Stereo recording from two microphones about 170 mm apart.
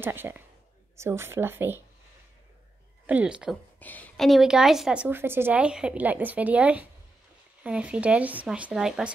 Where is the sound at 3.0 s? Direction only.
10° right (ahead or behind).